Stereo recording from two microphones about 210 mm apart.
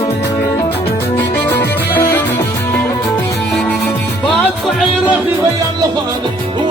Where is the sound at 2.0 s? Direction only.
10° left (ahead or behind).